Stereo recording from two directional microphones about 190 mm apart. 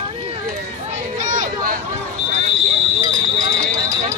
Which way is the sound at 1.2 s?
40° right (ahead or behind).